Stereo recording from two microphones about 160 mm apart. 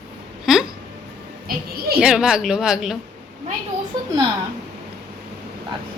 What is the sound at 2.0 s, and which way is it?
A woman's voice, 5° right (ahead or behind).